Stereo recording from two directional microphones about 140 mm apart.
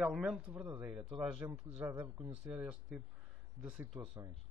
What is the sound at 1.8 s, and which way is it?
Speech, 20° right (ahead or behind).